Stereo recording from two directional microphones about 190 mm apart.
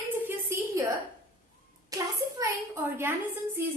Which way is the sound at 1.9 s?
15° right (ahead or behind).